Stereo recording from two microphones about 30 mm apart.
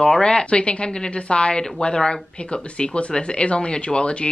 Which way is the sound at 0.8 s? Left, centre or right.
Left.